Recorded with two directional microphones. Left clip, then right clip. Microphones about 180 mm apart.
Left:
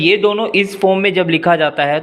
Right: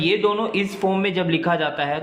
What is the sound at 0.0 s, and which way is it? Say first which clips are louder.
Speech: left 7 dB; 30° left (ahead or behind).